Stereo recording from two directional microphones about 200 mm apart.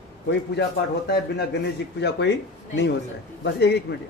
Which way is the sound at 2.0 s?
60° left (ahead or behind).